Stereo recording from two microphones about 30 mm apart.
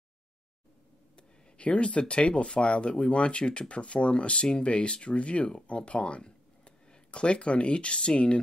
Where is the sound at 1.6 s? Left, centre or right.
Left.